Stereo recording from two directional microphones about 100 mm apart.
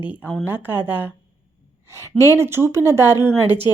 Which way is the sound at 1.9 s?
30° right (ahead or behind).